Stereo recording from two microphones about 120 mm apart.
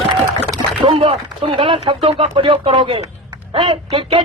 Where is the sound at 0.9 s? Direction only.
50° right (ahead or behind).